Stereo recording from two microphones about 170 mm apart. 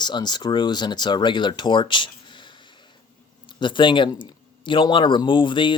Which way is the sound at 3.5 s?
30° left (ahead or behind).